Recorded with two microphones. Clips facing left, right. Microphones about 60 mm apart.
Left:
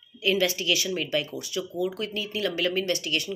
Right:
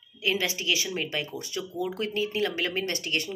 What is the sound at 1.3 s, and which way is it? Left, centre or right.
Speech, right.